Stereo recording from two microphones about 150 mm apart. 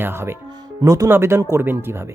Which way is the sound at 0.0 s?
15° right (ahead or behind).